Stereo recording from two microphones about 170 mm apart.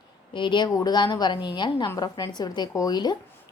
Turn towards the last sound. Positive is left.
turn(degrees=25)  # may be behind; listen again after turning